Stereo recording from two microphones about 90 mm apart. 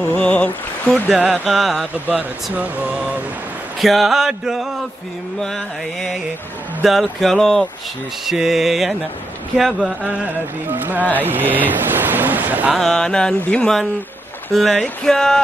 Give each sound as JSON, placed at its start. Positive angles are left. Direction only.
{"t": 0.1, "sound": "a sound", "side_deg": 20}
{"t": 0.9, "sound": "speech", "side_deg": -15}
{"t": 2.0, "sound": "speech", "side_deg": -15}
{"t": 3.8, "sound": "music", "side_deg": 0}
{"t": 5.4, "sound": "music", "side_deg": 5}
{"t": 10.0, "sound": "speech", "side_deg": -15}
{"t": 12.7, "sound": "music", "side_deg": 5}